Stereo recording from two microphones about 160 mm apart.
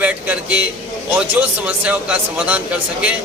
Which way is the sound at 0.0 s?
10° right (ahead or behind).